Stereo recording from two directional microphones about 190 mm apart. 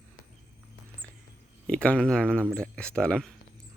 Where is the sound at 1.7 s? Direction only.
5° left (ahead or behind).